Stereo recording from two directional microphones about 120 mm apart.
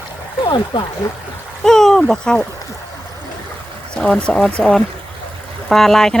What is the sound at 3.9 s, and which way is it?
Speech, 5° left (ahead or behind).